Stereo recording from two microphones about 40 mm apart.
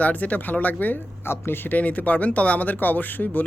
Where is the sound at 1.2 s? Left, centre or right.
Left.